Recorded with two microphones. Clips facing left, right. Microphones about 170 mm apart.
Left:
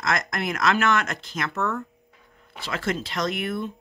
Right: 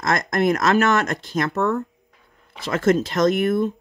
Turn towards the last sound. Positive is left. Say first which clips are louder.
# right 9 dB
turn(degrees=-40)  # may be behind; listen again after turning